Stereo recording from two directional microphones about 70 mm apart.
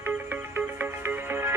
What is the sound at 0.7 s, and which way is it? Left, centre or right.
Music, right.